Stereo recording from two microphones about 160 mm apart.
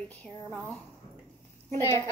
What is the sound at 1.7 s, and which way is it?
Speech, 15° left (ahead or behind).